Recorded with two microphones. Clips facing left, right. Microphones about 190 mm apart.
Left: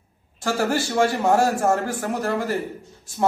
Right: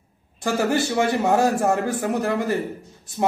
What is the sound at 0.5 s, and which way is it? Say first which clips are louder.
A man's voice: right 1 dB; 20° right (ahead or behind).